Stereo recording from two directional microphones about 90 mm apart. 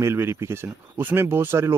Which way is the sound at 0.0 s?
30° right (ahead or behind).